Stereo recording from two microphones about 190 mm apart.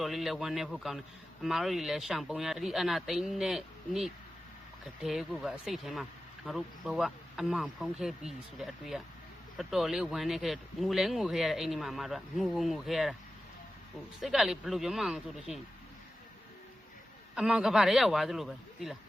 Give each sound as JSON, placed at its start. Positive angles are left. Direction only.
{"t": 0.0, "sound": "a man's voice", "side_deg": 0}
{"t": 14.2, "sound": "a man's voice", "side_deg": 0}
{"t": 17.3, "sound": "a man's voice", "side_deg": -5}